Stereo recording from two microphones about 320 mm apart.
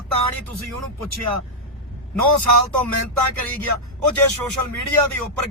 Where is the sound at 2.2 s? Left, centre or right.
Right.